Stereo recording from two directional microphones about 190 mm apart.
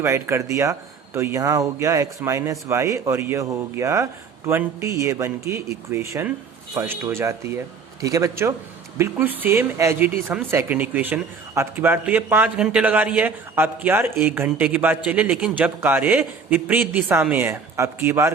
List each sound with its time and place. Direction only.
0.0 s speech: 15° right (ahead or behind)